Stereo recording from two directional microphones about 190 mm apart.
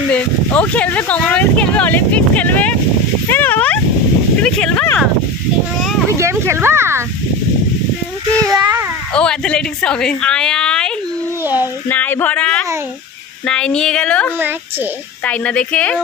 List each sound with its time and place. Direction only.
0.1 s speech: 5° left (ahead or behind)
6.1 s speech: 15° right (ahead or behind)
8.5 s child singing: 20° right (ahead or behind)
9.1 s a woman's voice: 5° left (ahead or behind)